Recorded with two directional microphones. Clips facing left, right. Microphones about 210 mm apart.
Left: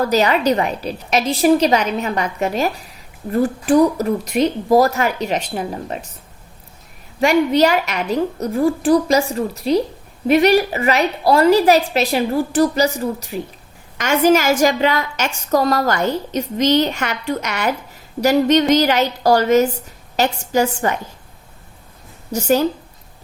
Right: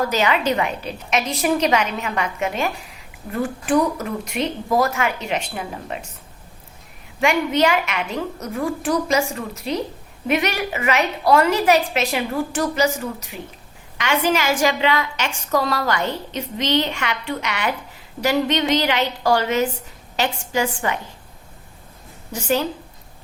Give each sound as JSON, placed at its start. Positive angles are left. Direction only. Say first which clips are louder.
{"t": 0.0, "sound": "a woman's voice", "louder": "left 4 dB", "side_deg": 35}
{"t": 7.2, "sound": "a woman's voice", "louder": "left 4 dB", "side_deg": 35}
{"t": 22.3, "sound": "a woman's voice", "louder": "left 5 dB", "side_deg": 40}